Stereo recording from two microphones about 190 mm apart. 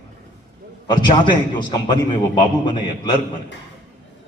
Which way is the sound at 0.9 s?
25° left (ahead or behind).